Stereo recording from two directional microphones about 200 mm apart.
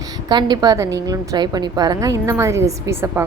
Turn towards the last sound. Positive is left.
turn(degrees=-10)  # may be behind; listen again after turning